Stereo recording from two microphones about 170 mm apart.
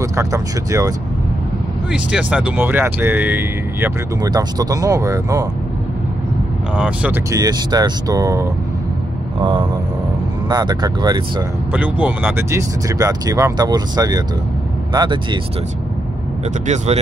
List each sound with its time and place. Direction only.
0.0 s speech: 15° right (ahead or behind)
1.9 s speech: 5° right (ahead or behind)
4.2 s speech: 20° right (ahead or behind)
6.7 s speech: 5° right (ahead or behind)
7.2 s speech: 20° right (ahead or behind)
9.4 s speech: 30° right (ahead or behind)
11.7 s speech: 10° right (ahead or behind); by 15.1 s 25° right (ahead or behind)
16.6 s speech: 40° right (ahead or behind)